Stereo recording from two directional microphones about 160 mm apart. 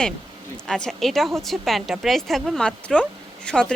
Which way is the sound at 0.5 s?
5° left (ahead or behind).